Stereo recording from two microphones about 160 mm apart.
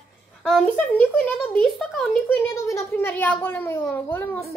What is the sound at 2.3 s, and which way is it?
Speech, 15° left (ahead or behind).